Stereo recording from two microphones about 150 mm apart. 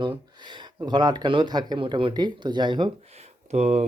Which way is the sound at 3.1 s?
45° right (ahead or behind).